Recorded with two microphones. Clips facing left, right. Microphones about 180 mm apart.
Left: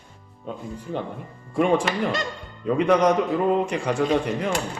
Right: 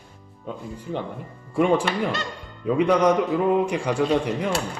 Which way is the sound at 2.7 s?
5° right (ahead or behind).